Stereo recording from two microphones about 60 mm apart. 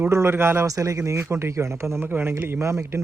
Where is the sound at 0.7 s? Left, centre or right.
Right.